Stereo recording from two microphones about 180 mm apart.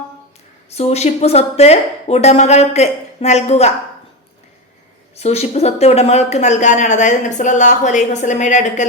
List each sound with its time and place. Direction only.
0.7 s speech: 35° left (ahead or behind)
5.1 s speech: 35° left (ahead or behind)